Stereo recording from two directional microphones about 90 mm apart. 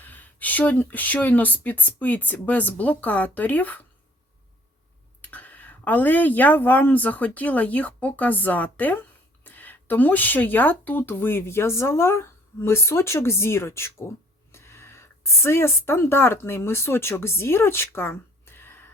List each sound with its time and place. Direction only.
0.0 s speech: 20° left (ahead or behind)
5.2 s a woman's voice: 15° left (ahead or behind)